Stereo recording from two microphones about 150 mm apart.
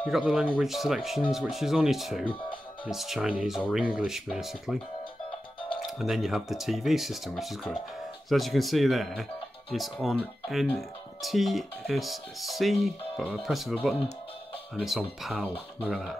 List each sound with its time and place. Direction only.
0.0 s speech: centre (ahead or behind)
2.2 s music: 35° left (ahead or behind)
2.9 s speech: centre (ahead or behind)
5.9 s speech: centre (ahead or behind)
14.8 s speech: centre (ahead or behind)